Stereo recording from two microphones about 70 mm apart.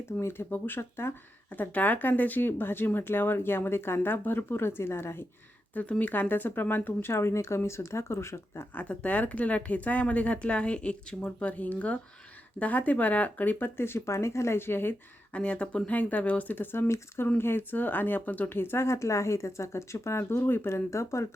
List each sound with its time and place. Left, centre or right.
0.2 s speech: left
1.5 s speech: left
5.7 s speech: left
8.7 s speech: centre
15.3 s speech: centre; by 21.2 s left